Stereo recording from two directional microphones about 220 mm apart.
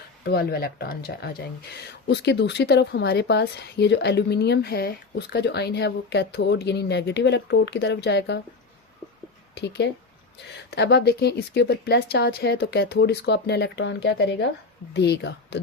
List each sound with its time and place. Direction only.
0.3 s speech: 45° left (ahead or behind)
9.6 s speech: 50° left (ahead or behind)